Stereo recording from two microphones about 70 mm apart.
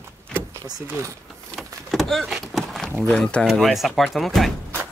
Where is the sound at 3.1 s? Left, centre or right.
Centre.